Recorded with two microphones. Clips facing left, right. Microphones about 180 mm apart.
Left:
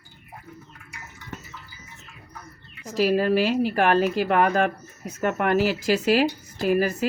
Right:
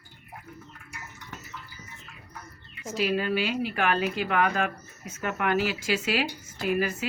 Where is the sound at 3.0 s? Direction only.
40° left (ahead or behind).